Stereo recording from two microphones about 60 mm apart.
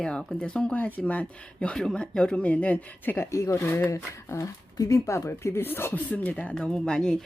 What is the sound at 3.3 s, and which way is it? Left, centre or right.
Speech, left.